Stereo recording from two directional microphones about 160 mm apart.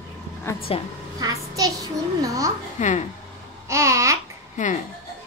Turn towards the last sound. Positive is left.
turn(degrees=50)  # may be behind; listen again after turning